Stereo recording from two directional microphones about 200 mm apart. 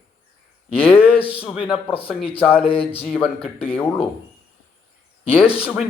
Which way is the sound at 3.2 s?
30° left (ahead or behind).